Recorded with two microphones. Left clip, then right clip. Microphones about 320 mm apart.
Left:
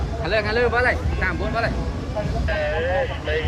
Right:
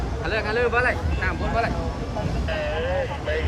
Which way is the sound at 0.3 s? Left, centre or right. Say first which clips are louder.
Left 3 dB; left.